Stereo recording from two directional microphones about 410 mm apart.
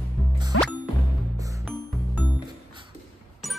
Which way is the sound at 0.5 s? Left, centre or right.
Left.